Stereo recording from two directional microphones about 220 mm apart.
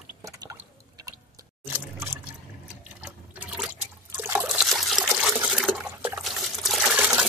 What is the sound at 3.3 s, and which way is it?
Liquid, 5° right (ahead or behind).